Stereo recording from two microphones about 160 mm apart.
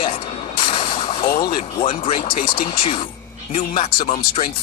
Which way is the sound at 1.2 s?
65° left (ahead or behind).